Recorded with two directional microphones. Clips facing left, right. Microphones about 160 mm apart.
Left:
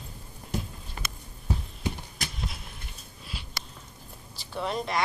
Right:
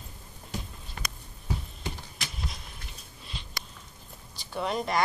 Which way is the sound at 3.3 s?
5° left (ahead or behind).